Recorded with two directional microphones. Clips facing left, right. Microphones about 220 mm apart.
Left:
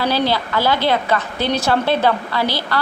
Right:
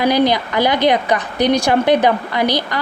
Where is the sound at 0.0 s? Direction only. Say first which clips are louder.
Right 4 dB; 15° right (ahead or behind).